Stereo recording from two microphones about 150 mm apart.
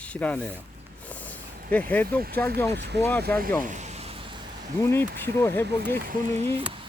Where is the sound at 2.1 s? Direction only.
85° right.